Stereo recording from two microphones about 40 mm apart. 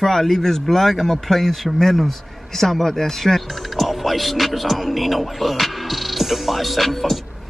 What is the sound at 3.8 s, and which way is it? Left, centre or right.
Speech, centre.